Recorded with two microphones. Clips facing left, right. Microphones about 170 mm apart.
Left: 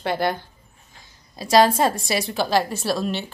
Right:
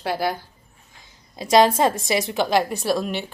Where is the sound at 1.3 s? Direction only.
20° right (ahead or behind).